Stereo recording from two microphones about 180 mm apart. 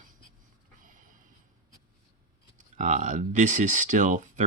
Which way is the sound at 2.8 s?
40° right (ahead or behind).